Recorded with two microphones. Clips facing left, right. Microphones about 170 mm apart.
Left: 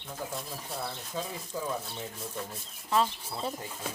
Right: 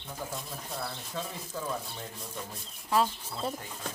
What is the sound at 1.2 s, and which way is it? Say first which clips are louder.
Speech: left 1 dB; 5° left (ahead or behind).